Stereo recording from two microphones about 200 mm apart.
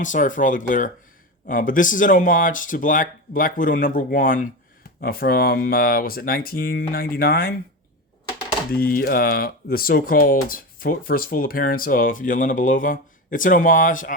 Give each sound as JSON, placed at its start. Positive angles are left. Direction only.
{"t": 0.0, "sound": "speech", "side_deg": 40}
{"t": 8.7, "sound": "speech", "side_deg": 50}